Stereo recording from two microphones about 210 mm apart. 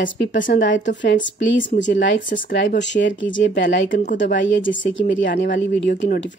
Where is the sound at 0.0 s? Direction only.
60° left (ahead or behind).